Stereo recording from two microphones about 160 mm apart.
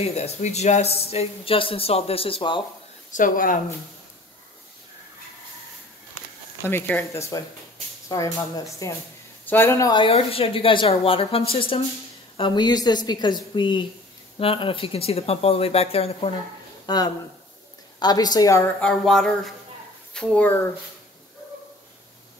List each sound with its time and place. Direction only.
0.0 s speech: 40° left (ahead or behind)
3.1 s speech: 55° left (ahead or behind)
6.6 s a woman's voice: 15° left (ahead or behind)
9.9 s a woman's voice: 35° left (ahead or behind)
16.8 s a woman's voice: 25° left (ahead or behind)
18.8 s music: 5° left (ahead or behind)
20.2 s speech: 10° left (ahead or behind)